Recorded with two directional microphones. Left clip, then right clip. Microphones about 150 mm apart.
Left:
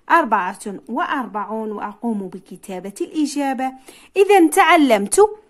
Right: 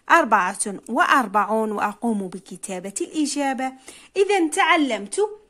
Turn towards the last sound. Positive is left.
turn(degrees=35)  # may be behind; listen again after turning